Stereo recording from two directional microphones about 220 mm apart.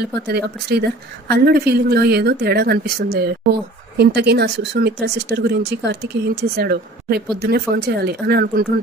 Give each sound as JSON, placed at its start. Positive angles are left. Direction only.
{"t": 0.3, "sound": "a woman's voice", "side_deg": -45}